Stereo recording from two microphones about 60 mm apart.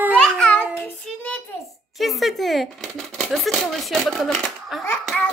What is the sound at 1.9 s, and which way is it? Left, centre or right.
Speech, centre.